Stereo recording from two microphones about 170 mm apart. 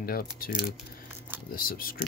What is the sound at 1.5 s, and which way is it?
Speech, 60° left (ahead or behind).